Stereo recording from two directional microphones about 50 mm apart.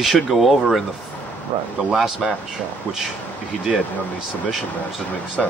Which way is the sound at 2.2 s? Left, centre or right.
Centre.